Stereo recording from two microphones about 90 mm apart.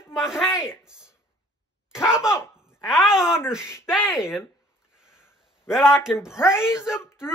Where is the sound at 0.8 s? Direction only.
10° right (ahead or behind).